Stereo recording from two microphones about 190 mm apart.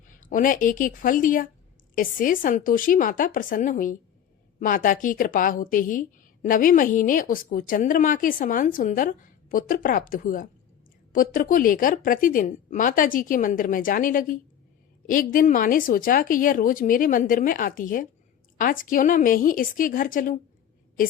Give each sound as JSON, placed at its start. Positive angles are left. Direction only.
{"t": 0.3, "sound": "a woman's voice", "side_deg": 45}